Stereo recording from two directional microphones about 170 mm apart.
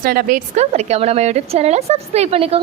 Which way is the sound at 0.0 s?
60° right (ahead or behind).